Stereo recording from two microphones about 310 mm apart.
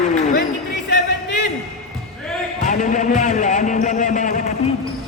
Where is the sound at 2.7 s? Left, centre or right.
Left.